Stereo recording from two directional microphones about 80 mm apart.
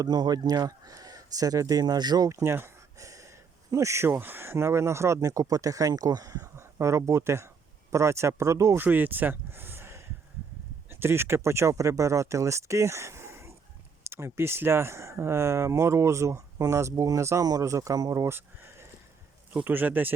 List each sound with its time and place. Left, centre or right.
0.0 s speech: right
2.4 s a sound: right
3.7 s speech: right
8.8 s speech: right